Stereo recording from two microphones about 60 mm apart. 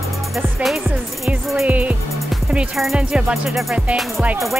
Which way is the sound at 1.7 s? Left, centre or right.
Right.